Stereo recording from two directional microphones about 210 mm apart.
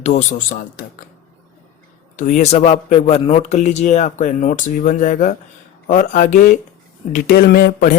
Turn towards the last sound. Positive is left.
turn(degrees=45)  # may be behind; listen again after turning